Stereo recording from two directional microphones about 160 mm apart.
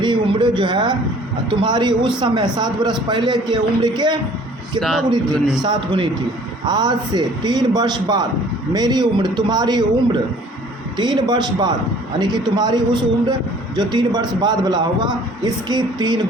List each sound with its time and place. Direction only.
0.0 s a sound: 30° right (ahead or behind)
1.6 s a man's voice: 25° right (ahead or behind)
4.8 s a man's voice: centre (ahead or behind)
5.6 s a man's voice: 30° right (ahead or behind)